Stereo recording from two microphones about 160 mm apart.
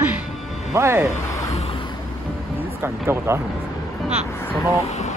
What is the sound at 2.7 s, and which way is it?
Speech, 15° right (ahead or behind).